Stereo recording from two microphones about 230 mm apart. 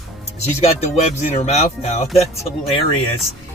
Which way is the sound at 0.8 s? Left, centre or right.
Left.